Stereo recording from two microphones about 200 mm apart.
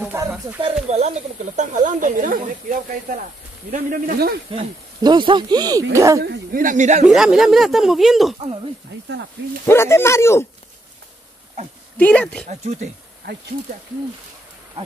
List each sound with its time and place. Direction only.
0.0 s a sound: 10° right (ahead or behind)
0.8 s speech: 35° right (ahead or behind)
4.5 s speech: 25° right (ahead or behind)
6.2 s speech: 50° right (ahead or behind)
7.1 s speech: centre (ahead or behind)
9.7 s speech: 10° left (ahead or behind)
12.0 s speech: 5° left (ahead or behind)
12.4 s speech: 35° right (ahead or behind)